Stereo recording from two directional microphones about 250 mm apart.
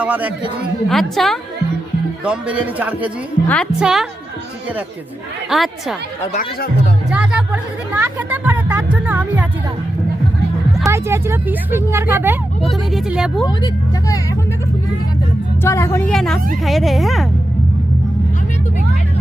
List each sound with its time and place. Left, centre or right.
0.0 s a man's voice: centre
5.5 s a man's voice: centre
6.3 s speech: left
7.1 s speech: centre
10.8 s speech: centre
15.6 s a woman's voice: centre